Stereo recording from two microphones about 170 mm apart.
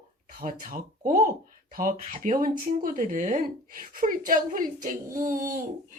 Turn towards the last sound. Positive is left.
turn(degrees=-50)  # may be behind; listen again after turning